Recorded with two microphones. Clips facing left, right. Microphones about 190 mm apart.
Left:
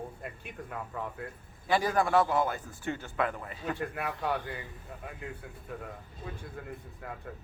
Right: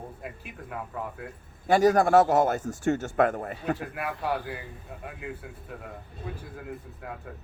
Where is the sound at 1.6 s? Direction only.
45° right (ahead or behind).